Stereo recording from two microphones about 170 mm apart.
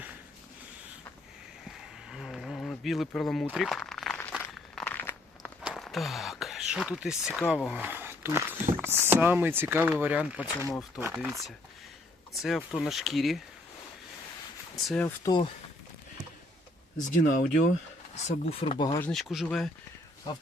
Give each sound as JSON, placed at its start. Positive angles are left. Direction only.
{"t": 1.6, "sound": "a sound", "side_deg": 0}
{"t": 3.1, "sound": "speech", "side_deg": 5}
{"t": 4.2, "sound": "walk", "side_deg": 10}
{"t": 5.6, "sound": "a sound", "side_deg": 0}
{"t": 7.5, "sound": "speech", "side_deg": -5}
{"t": 10.7, "sound": "speech", "side_deg": 15}
{"t": 11.0, "sound": "speech", "side_deg": -10}
{"t": 15.0, "sound": "speech", "side_deg": 20}
{"t": 17.1, "sound": "speech", "side_deg": 50}
{"t": 18.1, "sound": "speech", "side_deg": 40}
{"t": 19.1, "sound": "speech", "side_deg": 0}